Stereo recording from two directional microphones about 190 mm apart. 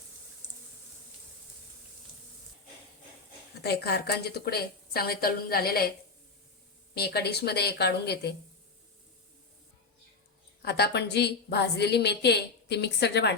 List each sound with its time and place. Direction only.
3.6 s a woman's voice: 60° left (ahead or behind)
6.9 s a woman's voice: 55° left (ahead or behind)
10.6 s a woman's voice: 60° left (ahead or behind)